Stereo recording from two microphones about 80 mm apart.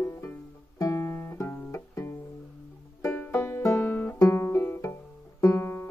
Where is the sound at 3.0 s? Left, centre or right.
Left.